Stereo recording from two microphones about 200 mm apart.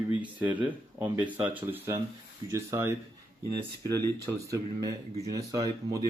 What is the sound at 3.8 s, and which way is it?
Speech, 15° left (ahead or behind).